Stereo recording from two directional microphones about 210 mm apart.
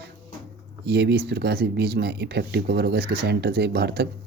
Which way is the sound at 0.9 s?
50° right (ahead or behind).